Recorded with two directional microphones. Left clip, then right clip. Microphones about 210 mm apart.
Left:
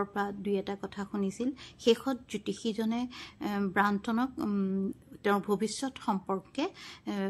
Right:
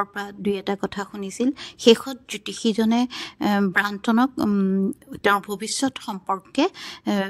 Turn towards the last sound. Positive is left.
turn(degrees=-40)  # may be behind; listen again after turning